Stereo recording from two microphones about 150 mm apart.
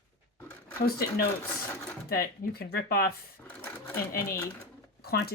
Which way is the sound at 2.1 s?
85° left.